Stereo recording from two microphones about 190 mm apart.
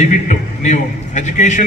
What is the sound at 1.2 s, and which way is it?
Speech, 40° left (ahead or behind).